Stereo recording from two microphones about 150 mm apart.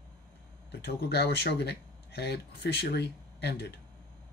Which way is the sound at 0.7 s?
90° left.